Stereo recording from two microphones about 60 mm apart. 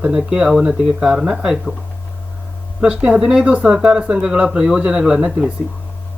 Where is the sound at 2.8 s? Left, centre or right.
Centre.